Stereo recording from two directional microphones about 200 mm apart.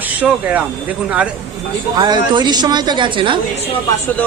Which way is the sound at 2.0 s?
20° right (ahead or behind).